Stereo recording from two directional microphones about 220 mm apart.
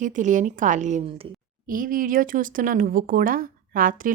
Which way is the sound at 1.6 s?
40° right (ahead or behind).